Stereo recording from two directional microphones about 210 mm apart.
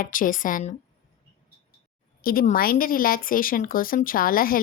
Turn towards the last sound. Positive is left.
turn(degrees=45)  # may be behind; listen again after turning